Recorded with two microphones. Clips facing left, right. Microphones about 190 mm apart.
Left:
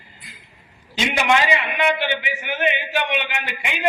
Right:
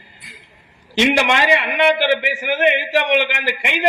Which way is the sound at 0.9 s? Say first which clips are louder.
Right 3 dB; 90° right.